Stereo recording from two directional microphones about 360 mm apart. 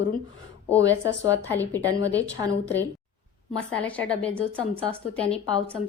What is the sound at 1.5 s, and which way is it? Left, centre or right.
Speech, centre.